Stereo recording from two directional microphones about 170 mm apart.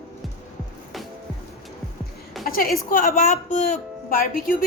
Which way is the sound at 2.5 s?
55° left (ahead or behind).